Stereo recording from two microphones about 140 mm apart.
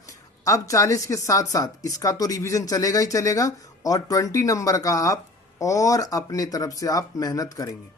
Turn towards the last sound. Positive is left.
turn(degrees=25)  # may be behind; listen again after turning